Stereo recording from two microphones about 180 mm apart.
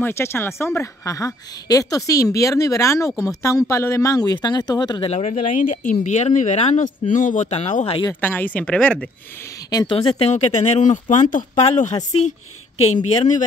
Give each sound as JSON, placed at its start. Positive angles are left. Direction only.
{"t": 0.0, "sound": "speech", "side_deg": 15}
{"t": 5.1, "sound": "speech", "side_deg": 35}
{"t": 8.1, "sound": "speech", "side_deg": 10}
{"t": 9.7, "sound": "speech", "side_deg": 20}
{"t": 9.9, "sound": "speech", "side_deg": 35}